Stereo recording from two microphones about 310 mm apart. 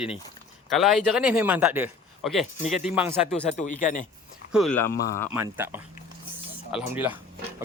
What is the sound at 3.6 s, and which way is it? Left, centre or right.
Speech, left.